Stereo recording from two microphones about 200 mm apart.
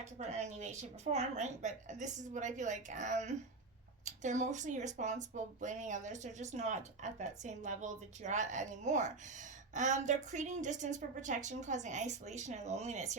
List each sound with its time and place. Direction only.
0.0 s speech: 35° right (ahead or behind)